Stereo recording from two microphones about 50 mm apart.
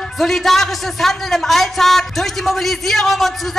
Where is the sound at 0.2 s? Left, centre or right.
Centre.